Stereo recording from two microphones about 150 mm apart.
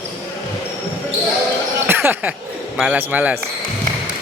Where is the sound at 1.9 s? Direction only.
15° right (ahead or behind).